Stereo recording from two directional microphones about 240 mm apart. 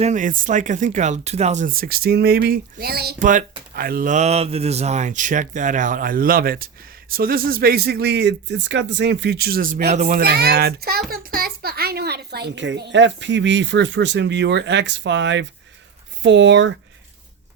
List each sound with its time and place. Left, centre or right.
0.0 s a child's voice: right